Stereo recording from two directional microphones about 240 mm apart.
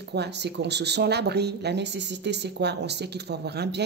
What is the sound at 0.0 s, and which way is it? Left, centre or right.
Speech, right.